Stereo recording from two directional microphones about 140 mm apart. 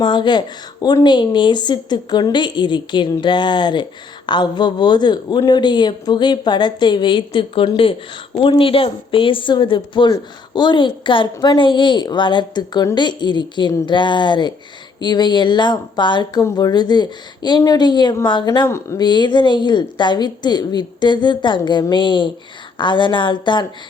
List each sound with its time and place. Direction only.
0.0 s speech: 35° left (ahead or behind)
18.7 s speech: 20° left (ahead or behind)
19.0 s speech: 30° left (ahead or behind)